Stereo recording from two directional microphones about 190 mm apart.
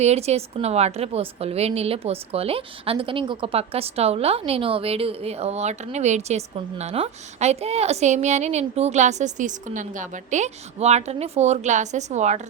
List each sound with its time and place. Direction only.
0.0 s a woman's voice: 35° right (ahead or behind)